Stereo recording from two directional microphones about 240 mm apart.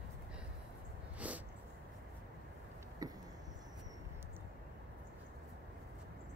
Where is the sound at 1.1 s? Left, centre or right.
Centre.